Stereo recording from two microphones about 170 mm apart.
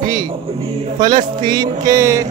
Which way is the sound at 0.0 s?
50° right (ahead or behind).